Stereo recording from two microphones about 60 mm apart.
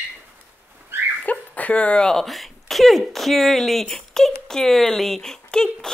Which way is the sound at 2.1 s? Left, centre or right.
Centre.